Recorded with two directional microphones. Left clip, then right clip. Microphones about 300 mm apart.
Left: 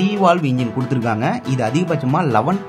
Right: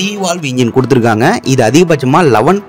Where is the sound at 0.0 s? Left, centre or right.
Right.